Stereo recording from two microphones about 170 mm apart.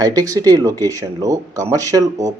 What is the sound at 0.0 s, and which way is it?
Speech, 20° right (ahead or behind).